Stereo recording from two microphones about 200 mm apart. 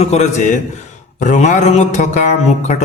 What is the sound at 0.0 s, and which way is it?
Speech, 35° left (ahead or behind).